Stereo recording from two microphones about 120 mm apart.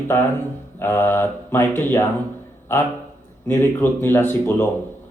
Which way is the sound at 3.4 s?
20° left (ahead or behind).